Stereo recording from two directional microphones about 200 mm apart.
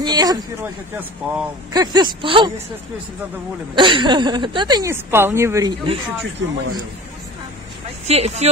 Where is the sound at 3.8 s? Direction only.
25° right (ahead or behind).